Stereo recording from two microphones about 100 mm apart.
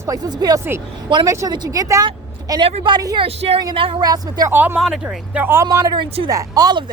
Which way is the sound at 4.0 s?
40° right (ahead or behind).